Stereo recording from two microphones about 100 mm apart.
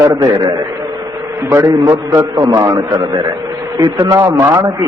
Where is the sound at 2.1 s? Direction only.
35° right (ahead or behind).